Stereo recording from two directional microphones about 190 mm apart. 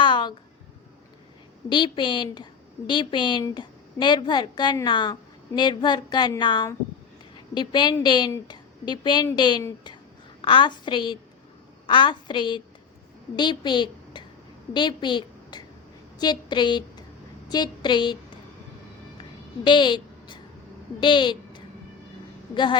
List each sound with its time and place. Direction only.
0.0 s a sound: 25° left (ahead or behind)
1.7 s a woman's voice: 25° left (ahead or behind)
19.6 s a woman's voice: 25° left (ahead or behind)